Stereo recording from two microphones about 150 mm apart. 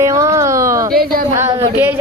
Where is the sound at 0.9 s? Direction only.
80° right.